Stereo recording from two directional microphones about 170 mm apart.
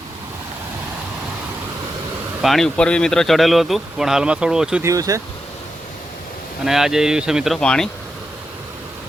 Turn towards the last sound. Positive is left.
turn(degrees=5)  # may be behind; listen again after turning